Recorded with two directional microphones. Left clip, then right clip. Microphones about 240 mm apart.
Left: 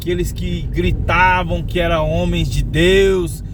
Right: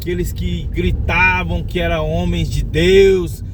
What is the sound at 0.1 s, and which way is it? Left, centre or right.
Speech, centre.